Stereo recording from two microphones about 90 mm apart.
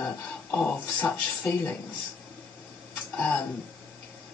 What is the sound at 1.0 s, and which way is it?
Speech, 15° left (ahead or behind).